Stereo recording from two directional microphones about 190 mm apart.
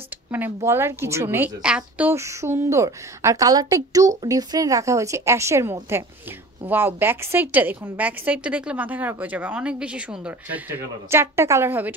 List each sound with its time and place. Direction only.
0.7 s a woman's voice: 15° right (ahead or behind)